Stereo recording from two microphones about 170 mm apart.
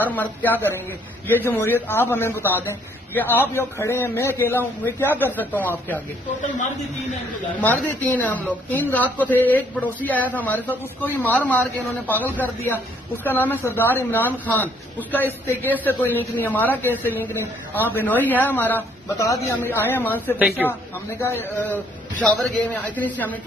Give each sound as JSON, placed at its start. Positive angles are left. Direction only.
{"t": 0.0, "sound": "a man's voice", "side_deg": 10}
{"t": 7.6, "sound": "a man's voice", "side_deg": 10}
{"t": 20.3, "sound": "speech", "side_deg": 0}
{"t": 20.6, "sound": "a man's voice", "side_deg": 15}